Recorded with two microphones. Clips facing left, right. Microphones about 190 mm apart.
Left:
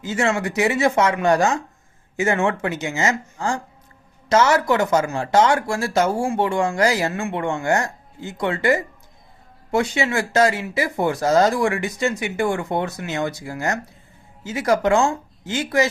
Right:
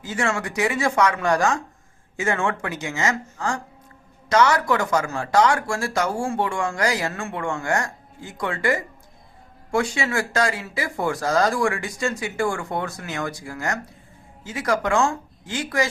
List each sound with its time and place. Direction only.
0.0 s speech: 25° left (ahead or behind)